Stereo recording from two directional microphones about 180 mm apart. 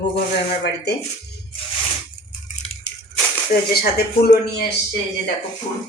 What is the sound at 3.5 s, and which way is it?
Speech, 50° left (ahead or behind).